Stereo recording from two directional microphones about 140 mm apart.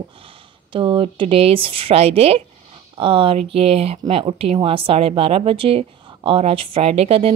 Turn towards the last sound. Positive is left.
turn(degrees=-45)  # may be behind; listen again after turning